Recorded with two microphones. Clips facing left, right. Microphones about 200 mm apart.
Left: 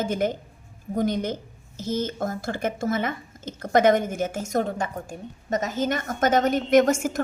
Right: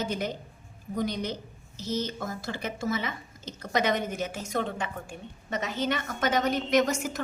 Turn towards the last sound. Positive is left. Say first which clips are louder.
# left 6 dB
turn(degrees=50)  # may be behind; listen again after turning